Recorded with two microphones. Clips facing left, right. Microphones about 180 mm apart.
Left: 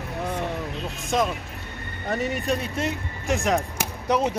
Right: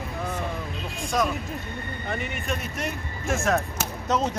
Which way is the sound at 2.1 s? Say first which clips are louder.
Left 6 dB; 40° left (ahead or behind).